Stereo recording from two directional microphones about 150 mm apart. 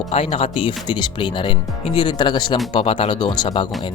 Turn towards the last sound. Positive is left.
turn(degrees=30)  # may be behind; listen again after turning